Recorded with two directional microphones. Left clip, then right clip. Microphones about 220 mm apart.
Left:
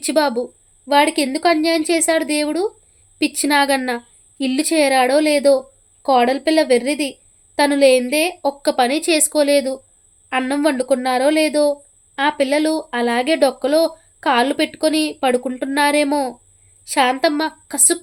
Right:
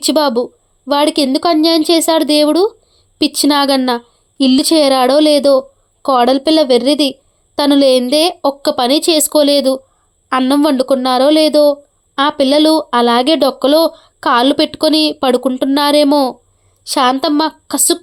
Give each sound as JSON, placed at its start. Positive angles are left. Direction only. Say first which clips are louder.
{"t": 0.0, "sound": "a woman's voice", "louder": "right 5 dB", "side_deg": -30}